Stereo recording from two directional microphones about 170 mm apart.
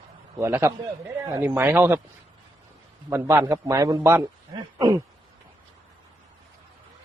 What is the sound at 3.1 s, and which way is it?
A man's voice, 15° right (ahead or behind).